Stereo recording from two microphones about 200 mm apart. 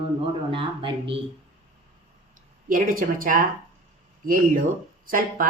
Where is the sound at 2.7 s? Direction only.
45° right (ahead or behind).